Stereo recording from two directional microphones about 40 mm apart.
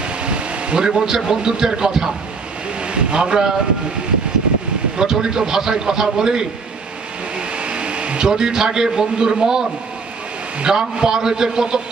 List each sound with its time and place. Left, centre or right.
0.0 s a man's voice: right
2.8 s vehicle: right
4.9 s a man's voice: centre
7.3 s a sound: right
8.3 s a man's voice: centre